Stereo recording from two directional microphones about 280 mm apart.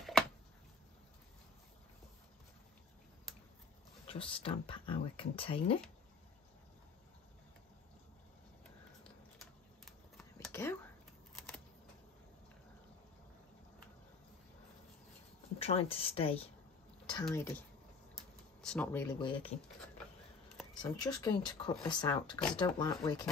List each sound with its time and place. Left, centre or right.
4.1 s speech: centre
9.0 s a sound: centre
15.6 s speech: left
18.6 s speech: centre
20.8 s speech: centre